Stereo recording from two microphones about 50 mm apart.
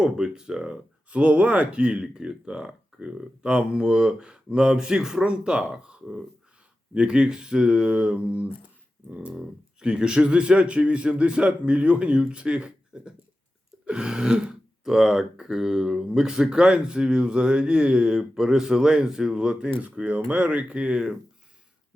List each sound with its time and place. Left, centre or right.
0.0 s speech: centre
1.1 s speech: right
9.8 s a man's voice: centre
20.1 s a man's voice: right